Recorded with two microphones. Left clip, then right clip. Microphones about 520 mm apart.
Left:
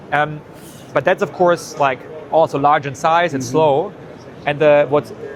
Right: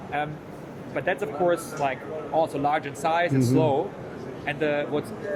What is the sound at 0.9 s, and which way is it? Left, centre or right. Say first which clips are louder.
Speech: left 11 dB; left.